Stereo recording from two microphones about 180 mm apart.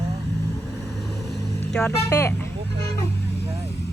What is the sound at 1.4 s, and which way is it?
Vehicle, 20° left (ahead or behind).